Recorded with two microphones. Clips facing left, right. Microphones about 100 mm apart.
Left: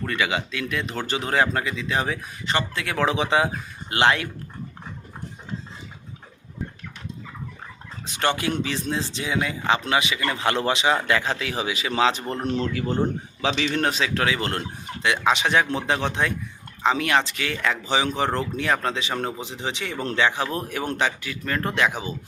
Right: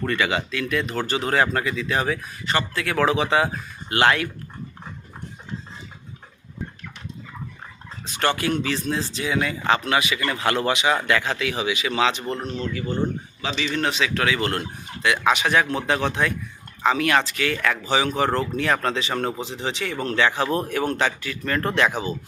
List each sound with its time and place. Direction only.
0.1 s speech: 10° left (ahead or behind)
8.0 s speech: 20° left (ahead or behind); by 12.2 s 35° left (ahead or behind)
12.5 s speech: 80° left
13.4 s a man's voice: 70° left (ahead or behind)
13.8 s speech: 35° left (ahead or behind); by 22.1 s 15° left (ahead or behind)